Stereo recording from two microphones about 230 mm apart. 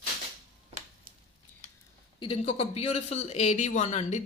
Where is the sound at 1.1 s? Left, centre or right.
Right.